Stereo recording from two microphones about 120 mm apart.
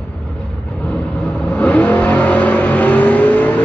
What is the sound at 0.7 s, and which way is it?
Vehicle, 10° left (ahead or behind).